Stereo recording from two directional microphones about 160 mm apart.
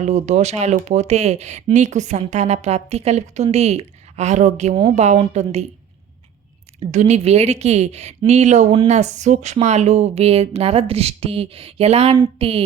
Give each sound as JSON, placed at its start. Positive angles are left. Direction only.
{"t": 0.0, "sound": "speech", "side_deg": -45}
{"t": 6.9, "sound": "speech", "side_deg": -45}